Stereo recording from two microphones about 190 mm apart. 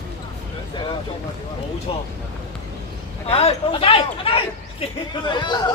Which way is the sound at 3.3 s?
30° left (ahead or behind).